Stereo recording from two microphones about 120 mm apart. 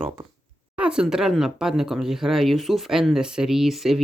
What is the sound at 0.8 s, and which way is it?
Speech, 5° right (ahead or behind).